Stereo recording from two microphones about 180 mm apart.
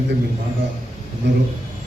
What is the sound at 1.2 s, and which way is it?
Speech, 75° right (ahead or behind).